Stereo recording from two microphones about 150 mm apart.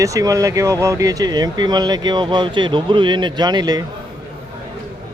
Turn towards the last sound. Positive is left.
turn(degrees=-30)  # may be behind; listen again after turning